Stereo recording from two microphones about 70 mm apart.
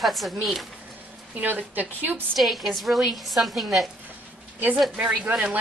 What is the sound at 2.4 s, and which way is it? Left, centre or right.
A woman's voice, centre.